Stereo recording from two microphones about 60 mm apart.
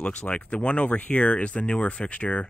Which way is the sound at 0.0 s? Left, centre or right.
Centre.